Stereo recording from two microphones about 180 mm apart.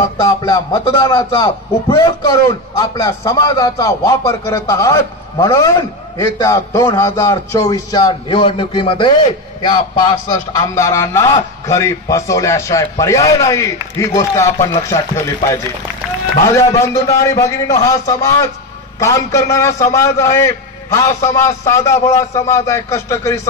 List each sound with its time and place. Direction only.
0.2 s a man's voice: 20° left (ahead or behind)
16.4 s a man's voice: 15° left (ahead or behind)